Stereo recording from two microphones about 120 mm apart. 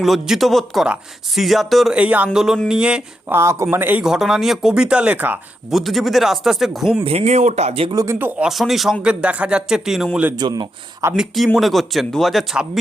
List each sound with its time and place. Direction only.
0.0 s speech: centre (ahead or behind)
2.0 s speech: 10° right (ahead or behind)
3.3 s speech: 25° right (ahead or behind)
4.0 s speech: 5° right (ahead or behind)
5.7 s speech: centre (ahead or behind)
7.0 s speech: 55° right (ahead or behind)
7.9 s speech: 25° right (ahead or behind)
8.4 s speech: centre (ahead or behind)
10.3 s speech: 35° right (ahead or behind)
11.2 s speech: centre (ahead or behind)